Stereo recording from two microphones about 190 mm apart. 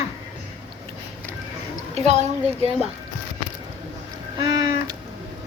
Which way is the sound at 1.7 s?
35° right (ahead or behind).